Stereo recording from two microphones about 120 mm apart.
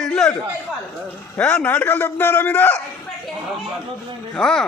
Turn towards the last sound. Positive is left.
turn(degrees=5)  # may be behind; listen again after turning